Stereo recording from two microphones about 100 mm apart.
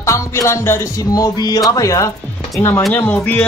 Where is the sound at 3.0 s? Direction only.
20° left (ahead or behind).